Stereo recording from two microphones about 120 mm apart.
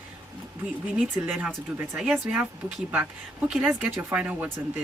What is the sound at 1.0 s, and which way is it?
Speech, 10° right (ahead or behind).